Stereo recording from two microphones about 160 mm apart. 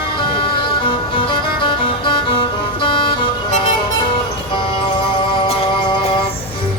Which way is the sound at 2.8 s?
30° left (ahead or behind).